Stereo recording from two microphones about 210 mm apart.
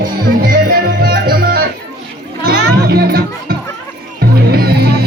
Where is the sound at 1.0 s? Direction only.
45° right (ahead or behind).